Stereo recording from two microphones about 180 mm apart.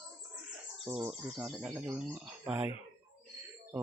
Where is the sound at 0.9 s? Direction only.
15° right (ahead or behind).